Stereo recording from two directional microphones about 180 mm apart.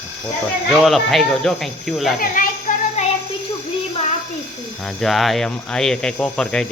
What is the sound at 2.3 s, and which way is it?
Music, 45° left (ahead or behind).